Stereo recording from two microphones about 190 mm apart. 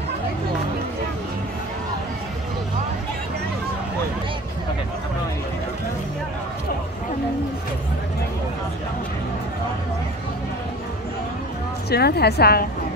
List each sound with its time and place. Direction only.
11.9 s a woman's voice: 55° left (ahead or behind)